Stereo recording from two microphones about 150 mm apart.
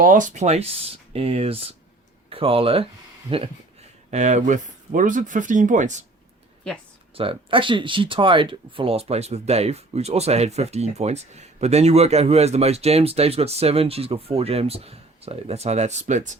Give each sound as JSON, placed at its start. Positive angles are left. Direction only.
{"t": 0.0, "sound": "speech", "side_deg": -60}
{"t": 4.1, "sound": "speech", "side_deg": -50}
{"t": 7.2, "sound": "speech", "side_deg": -35}